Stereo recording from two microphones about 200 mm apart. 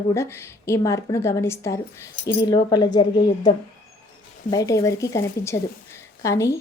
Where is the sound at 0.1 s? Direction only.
15° left (ahead or behind).